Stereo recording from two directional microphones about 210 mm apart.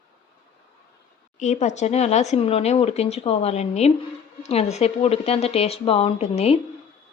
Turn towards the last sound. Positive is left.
turn(degrees=30)  # may be behind; listen again after turning